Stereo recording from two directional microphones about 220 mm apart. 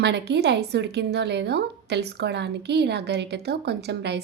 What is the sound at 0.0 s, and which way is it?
A woman's voice, 50° right (ahead or behind).